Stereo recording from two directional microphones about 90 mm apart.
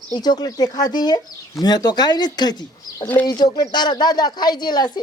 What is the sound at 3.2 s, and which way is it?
Speech, 50° left (ahead or behind).